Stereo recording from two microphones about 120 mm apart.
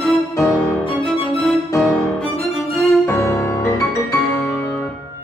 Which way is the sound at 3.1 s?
20° left (ahead or behind).